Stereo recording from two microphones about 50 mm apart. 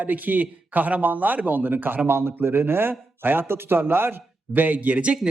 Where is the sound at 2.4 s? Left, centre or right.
Right.